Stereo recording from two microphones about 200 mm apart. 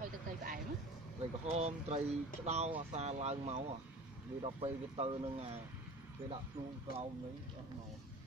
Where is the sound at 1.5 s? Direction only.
35° right (ahead or behind).